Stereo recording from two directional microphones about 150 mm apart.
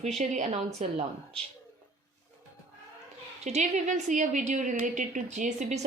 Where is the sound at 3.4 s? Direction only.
50° right (ahead or behind).